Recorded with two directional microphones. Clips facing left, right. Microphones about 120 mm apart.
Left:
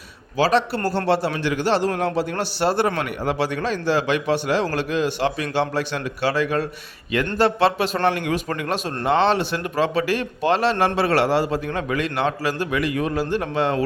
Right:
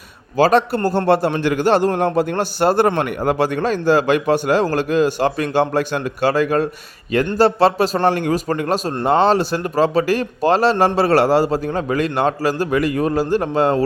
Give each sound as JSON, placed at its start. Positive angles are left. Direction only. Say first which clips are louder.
{"t": 0.3, "sound": "speech", "louder": "right 5 dB", "side_deg": -50}
{"t": 0.8, "sound": "speech", "louder": "right 5 dB", "side_deg": -15}
{"t": 1.0, "sound": "speech", "louder": "right 5 dB", "side_deg": -50}